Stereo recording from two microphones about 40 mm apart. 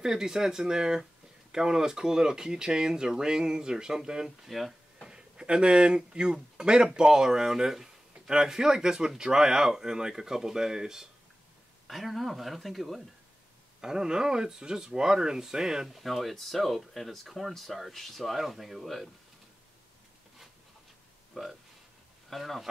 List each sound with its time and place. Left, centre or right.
0.0 s speech: centre
4.5 s speech: centre
5.0 s speech: centre
11.9 s speech: centre
13.7 s speech: centre
15.9 s speech: centre
21.4 s speech: centre